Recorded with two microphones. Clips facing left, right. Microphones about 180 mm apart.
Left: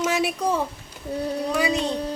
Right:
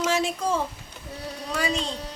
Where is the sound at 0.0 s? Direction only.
15° left (ahead or behind).